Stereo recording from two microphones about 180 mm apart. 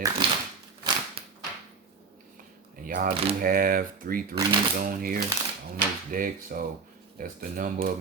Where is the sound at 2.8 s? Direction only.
50° right (ahead or behind).